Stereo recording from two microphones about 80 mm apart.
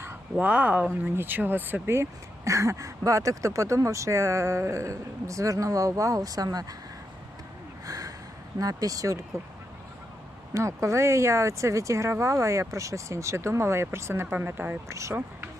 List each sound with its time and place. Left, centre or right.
0.3 s speech: centre; by 6.7 s right
7.9 s a sound: right
8.5 s speech: right
10.5 s speech: right